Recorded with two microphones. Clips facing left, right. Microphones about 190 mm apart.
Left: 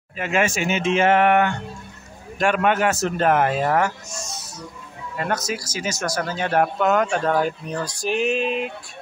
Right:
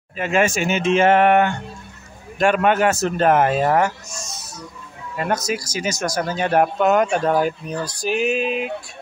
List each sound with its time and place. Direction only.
0.2 s a man's voice: 35° right (ahead or behind)
5.2 s speech: 15° right (ahead or behind)